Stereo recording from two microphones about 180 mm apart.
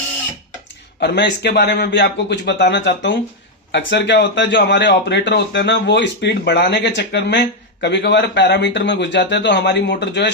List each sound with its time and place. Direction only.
0.9 s speech: 70° left (ahead or behind)